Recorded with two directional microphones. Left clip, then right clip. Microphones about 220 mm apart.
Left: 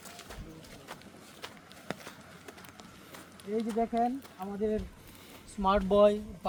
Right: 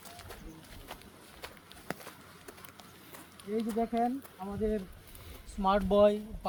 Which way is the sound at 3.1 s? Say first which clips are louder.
Left 1 dB; centre (ahead or behind).